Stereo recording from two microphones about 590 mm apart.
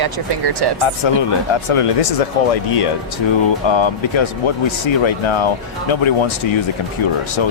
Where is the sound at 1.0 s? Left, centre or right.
Left.